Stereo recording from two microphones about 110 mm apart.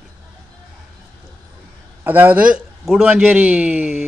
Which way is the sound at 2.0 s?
20° right (ahead or behind).